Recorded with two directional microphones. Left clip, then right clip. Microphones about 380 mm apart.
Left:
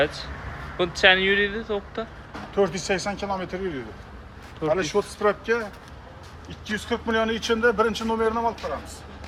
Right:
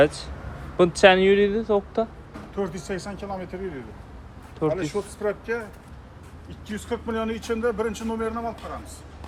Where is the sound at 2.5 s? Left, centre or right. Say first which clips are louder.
Left 7 dB; centre.